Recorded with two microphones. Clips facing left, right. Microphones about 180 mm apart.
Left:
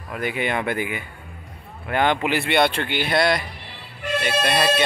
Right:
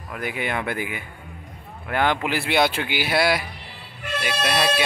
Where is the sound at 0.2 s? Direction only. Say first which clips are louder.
Left 3 dB; centre (ahead or behind).